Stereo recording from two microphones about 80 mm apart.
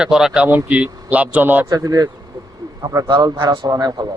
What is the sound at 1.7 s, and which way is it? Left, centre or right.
A man's voice, right.